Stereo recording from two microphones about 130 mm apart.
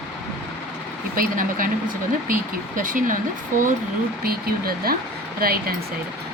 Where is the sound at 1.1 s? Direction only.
90° right.